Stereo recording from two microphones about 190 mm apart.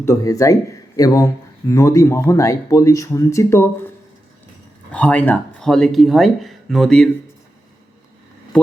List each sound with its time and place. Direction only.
0.0 s speech: 15° left (ahead or behind)
4.9 s speech: 5° left (ahead or behind)